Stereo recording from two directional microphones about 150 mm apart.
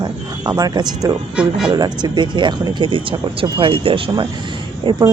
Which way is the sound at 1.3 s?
5° right (ahead or behind).